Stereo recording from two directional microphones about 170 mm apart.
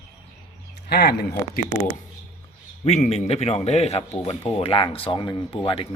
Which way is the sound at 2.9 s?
40° left (ahead or behind).